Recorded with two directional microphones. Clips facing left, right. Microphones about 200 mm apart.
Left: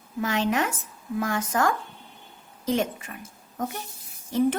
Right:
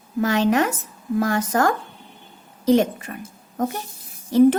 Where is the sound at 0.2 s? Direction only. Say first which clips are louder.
Right 6 dB; 40° right (ahead or behind).